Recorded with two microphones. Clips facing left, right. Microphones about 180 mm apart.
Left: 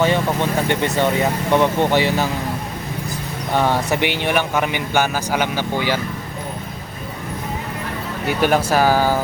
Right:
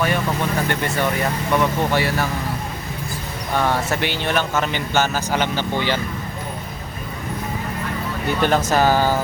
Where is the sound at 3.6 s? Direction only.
15° left (ahead or behind).